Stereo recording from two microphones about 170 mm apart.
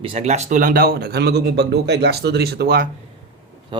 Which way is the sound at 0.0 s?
40° right (ahead or behind).